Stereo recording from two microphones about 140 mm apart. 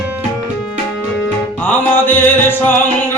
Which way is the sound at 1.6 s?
15° left (ahead or behind).